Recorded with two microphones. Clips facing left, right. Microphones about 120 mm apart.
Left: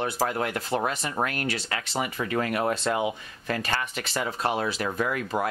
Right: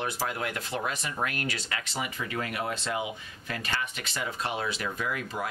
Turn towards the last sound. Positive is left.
turn(degrees=50)  # may be behind; listen again after turning